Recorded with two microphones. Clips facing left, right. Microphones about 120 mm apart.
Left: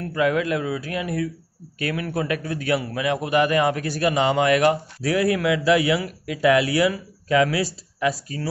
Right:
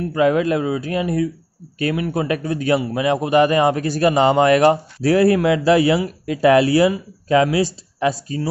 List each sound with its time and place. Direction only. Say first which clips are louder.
0.1 s a man's voice: right 4 dB; 30° right (ahead or behind)